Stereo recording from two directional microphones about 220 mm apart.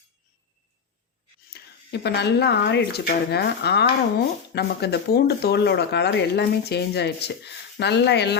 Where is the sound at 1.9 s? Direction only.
50° left (ahead or behind).